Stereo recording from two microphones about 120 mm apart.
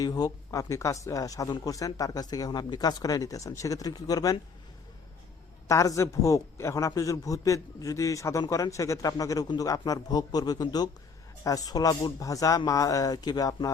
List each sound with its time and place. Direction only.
0.0 s a man's voice: 30° left (ahead or behind)
5.6 s a man's voice: 25° left (ahead or behind)